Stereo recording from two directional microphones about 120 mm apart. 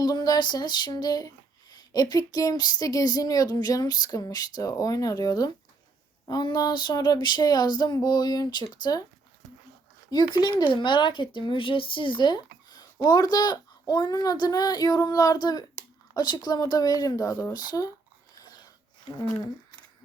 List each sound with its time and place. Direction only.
0.0 s speech: 35° left (ahead or behind)
10.1 s speech: 35° left (ahead or behind)
18.3 s a sound: 35° left (ahead or behind)